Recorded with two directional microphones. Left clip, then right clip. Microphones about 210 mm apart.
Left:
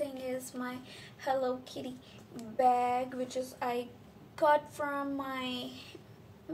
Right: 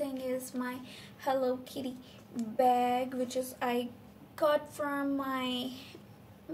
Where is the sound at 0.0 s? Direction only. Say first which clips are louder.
Right 1 dB; 10° right (ahead or behind).